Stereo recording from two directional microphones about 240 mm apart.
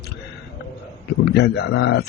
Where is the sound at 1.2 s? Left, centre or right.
Left.